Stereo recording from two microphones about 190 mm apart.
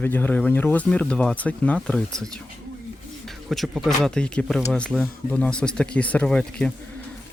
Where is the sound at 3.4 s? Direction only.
Centre (ahead or behind).